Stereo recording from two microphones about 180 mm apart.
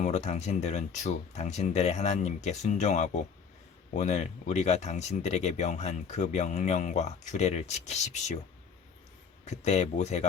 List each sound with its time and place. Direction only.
0.0 s speech: 40° left (ahead or behind)
9.5 s speech: 40° left (ahead or behind)